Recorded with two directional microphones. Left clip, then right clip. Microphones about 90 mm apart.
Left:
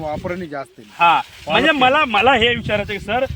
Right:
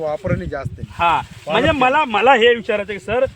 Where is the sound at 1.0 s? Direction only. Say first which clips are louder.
Left 3 dB; 75° right (ahead or behind).